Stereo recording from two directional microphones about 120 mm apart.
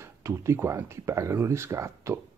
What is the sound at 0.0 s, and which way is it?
Speech, 25° right (ahead or behind).